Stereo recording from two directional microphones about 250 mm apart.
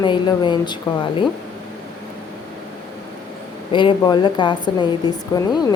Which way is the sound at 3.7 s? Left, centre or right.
Centre.